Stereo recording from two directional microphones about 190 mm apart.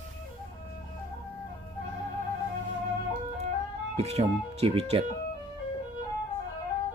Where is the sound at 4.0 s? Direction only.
35° right (ahead or behind).